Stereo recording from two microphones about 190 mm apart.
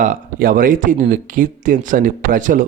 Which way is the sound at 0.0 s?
45° right (ahead or behind).